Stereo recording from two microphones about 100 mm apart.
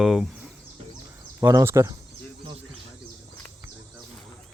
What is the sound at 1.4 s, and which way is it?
Speech, 30° right (ahead or behind).